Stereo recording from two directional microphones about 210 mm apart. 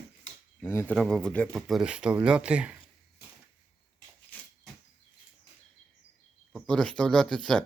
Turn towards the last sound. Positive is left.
turn(degrees=0)  # may be behind; listen again after turning